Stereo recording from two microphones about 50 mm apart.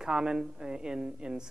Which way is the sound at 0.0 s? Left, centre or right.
Centre.